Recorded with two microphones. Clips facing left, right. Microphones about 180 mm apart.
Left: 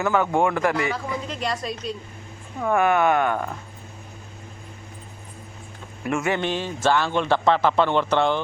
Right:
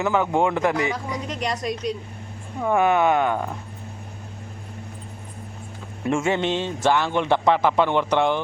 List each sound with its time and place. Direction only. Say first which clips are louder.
0.0 s a man's voice: even; 15° right (ahead or behind)
6.1 s a man's voice: right 2 dB; 25° right (ahead or behind)